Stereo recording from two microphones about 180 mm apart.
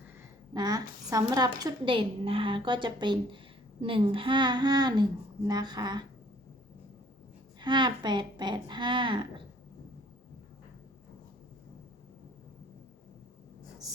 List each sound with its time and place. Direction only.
0.5 s a woman's voice: 20° right (ahead or behind)
7.6 s a woman's voice: 25° right (ahead or behind)